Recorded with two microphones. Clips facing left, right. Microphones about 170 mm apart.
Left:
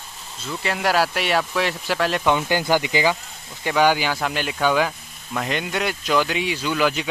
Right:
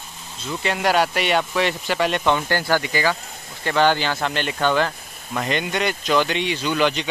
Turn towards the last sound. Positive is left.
turn(degrees=5)  # may be behind; listen again after turning